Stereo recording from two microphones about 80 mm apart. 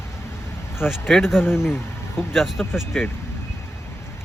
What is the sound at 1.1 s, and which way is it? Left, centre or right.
Speech, centre.